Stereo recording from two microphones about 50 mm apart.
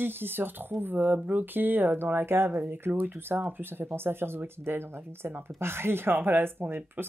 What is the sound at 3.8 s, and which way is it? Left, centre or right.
Speech, right.